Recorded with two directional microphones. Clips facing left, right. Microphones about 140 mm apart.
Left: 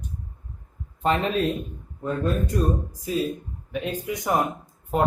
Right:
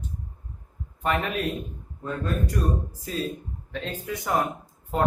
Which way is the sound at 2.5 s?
15° left (ahead or behind).